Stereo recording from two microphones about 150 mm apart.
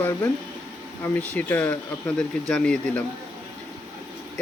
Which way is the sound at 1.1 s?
10° left (ahead or behind).